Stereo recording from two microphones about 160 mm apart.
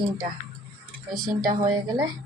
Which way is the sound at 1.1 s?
60° right (ahead or behind).